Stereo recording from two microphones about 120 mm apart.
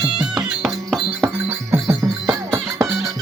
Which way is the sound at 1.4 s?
20° right (ahead or behind).